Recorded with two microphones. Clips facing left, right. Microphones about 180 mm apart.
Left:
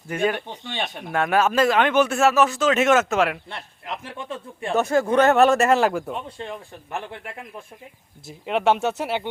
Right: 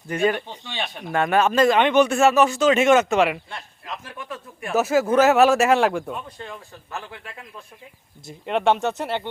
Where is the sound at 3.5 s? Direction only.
25° left (ahead or behind).